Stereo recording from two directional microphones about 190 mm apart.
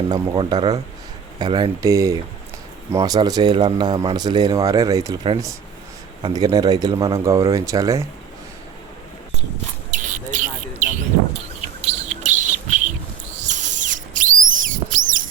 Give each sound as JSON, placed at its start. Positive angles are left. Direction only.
{"t": 0.1, "sound": "a man's voice", "side_deg": -20}
{"t": 6.2, "sound": "a man's voice", "side_deg": -20}
{"t": 9.9, "sound": "bird", "side_deg": -40}
{"t": 13.5, "sound": "a sound", "side_deg": -40}